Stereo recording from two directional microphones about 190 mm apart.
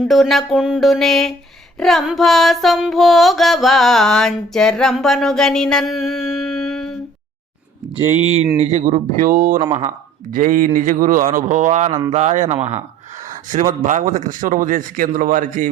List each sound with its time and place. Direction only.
0.0 s music: centre (ahead or behind)
7.9 s speech: 35° right (ahead or behind)